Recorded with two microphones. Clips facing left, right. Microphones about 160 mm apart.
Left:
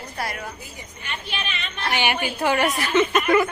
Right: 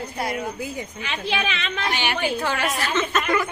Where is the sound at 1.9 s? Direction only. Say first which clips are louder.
Left 2 dB; 15° left (ahead or behind).